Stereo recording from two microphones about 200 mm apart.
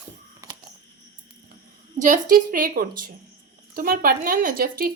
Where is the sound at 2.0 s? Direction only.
40° right (ahead or behind).